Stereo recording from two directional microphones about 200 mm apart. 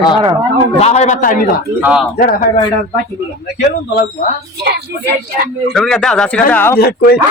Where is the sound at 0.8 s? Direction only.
30° left (ahead or behind).